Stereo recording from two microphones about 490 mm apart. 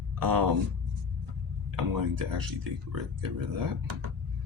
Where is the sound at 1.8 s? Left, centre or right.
Right.